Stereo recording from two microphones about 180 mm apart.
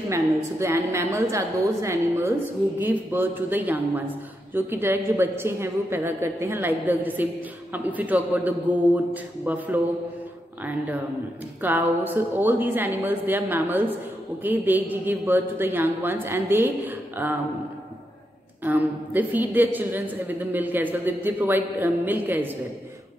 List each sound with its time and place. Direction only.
0.1 s a woman's voice: 15° right (ahead or behind)
11.6 s a woman's voice: 10° right (ahead or behind)
18.6 s a woman's voice: 10° right (ahead or behind)